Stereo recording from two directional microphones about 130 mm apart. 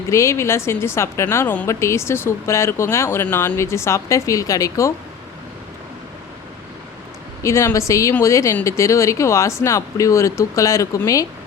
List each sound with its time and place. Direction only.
0.1 s a woman's voice: 20° left (ahead or behind)
7.4 s a woman's voice: 25° left (ahead or behind)